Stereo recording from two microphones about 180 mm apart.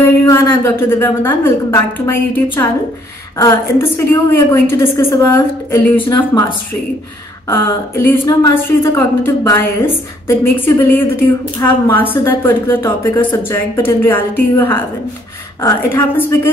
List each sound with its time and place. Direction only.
0.3 s a woman's voice: 15° left (ahead or behind)
7.4 s a woman's voice: 15° left (ahead or behind)